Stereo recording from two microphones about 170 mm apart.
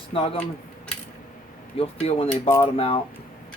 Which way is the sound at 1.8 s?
35° left (ahead or behind).